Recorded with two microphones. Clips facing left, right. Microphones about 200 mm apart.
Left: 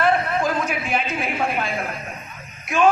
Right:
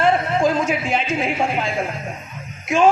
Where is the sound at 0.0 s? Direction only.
25° right (ahead or behind).